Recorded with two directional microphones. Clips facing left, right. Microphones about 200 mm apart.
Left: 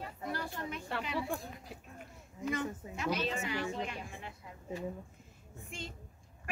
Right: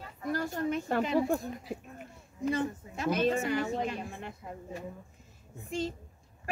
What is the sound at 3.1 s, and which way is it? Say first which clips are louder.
A woman's voice: right 7 dB; 50° right (ahead or behind).